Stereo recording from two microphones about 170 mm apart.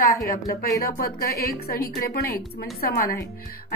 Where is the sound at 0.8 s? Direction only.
60° left (ahead or behind).